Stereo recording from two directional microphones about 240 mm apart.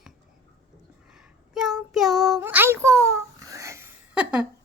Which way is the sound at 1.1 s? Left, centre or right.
Centre.